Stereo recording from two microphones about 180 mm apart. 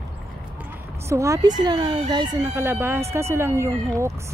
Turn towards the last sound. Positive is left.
turn(degrees=-15)  # may be behind; listen again after turning